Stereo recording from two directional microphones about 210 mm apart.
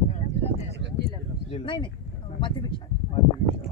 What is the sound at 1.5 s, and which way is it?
Speech, 25° left (ahead or behind).